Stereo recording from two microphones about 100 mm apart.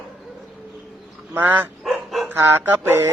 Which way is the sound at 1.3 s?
20° right (ahead or behind).